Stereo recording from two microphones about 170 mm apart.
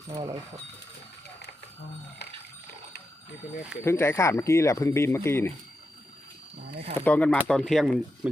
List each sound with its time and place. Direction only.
0.1 s speech: 25° right (ahead or behind)
3.8 s speech: 15° left (ahead or behind)
7.0 s speech: 10° left (ahead or behind)